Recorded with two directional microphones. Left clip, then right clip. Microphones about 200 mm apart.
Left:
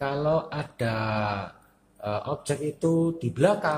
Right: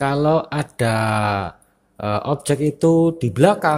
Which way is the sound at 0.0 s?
55° right (ahead or behind).